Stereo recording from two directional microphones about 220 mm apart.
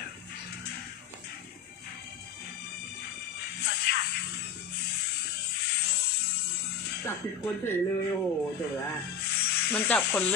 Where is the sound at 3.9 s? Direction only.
50° left (ahead or behind).